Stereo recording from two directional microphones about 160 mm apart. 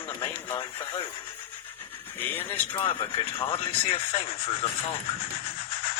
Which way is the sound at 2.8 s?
35° left (ahead or behind).